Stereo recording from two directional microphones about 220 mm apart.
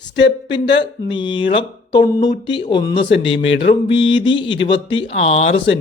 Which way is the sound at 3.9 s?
20° left (ahead or behind).